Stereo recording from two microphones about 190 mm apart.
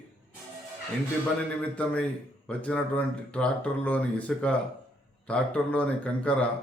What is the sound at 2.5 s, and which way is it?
Speech, 5° left (ahead or behind).